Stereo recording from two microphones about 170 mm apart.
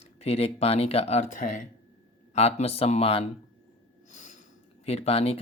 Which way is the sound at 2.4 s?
40° left (ahead or behind).